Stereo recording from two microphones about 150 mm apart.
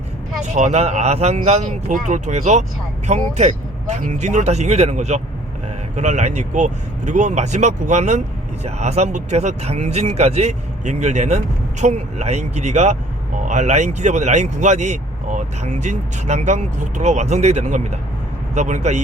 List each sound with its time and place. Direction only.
0.5 s speech: 50° right (ahead or behind)